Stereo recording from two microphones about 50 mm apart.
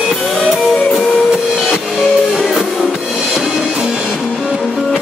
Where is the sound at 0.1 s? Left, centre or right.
Centre.